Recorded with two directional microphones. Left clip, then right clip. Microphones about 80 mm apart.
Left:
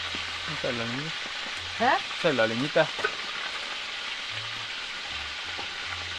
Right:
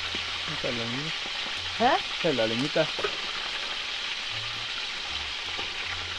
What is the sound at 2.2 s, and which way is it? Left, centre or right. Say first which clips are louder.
Speech: left 3 dB; centre.